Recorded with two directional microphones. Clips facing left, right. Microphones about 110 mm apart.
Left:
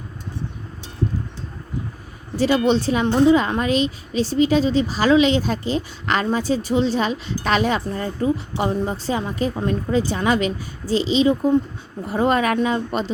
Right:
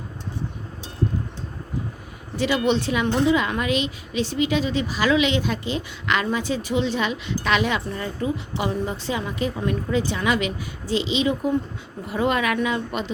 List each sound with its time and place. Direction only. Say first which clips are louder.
2.3 s speech: left 4 dB; 35° left (ahead or behind)